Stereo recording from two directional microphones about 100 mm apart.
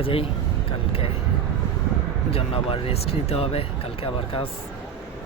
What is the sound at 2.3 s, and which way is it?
Speech, 70° left (ahead or behind).